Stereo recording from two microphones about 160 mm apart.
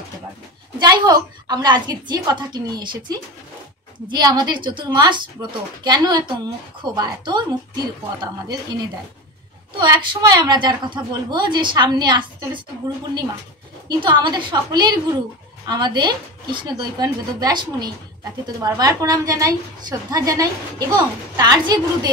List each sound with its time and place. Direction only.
0.7 s a woman's voice: 25° right (ahead or behind)
4.1 s a woman's voice: 25° right (ahead or behind)
9.8 s a woman's voice: 25° right (ahead or behind)
13.8 s a woman's voice: 30° right (ahead or behind)